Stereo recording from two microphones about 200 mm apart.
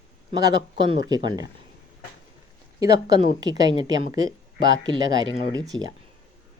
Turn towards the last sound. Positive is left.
turn(degrees=-20)  # may be behind; listen again after turning